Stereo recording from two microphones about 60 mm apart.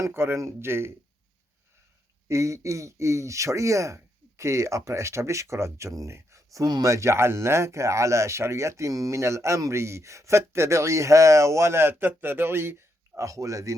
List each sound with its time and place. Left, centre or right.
0.1 s a man's voice: right
2.2 s a man's voice: right
13.1 s speech: right